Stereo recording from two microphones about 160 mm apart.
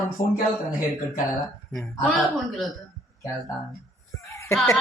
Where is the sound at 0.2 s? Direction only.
60° left (ahead or behind).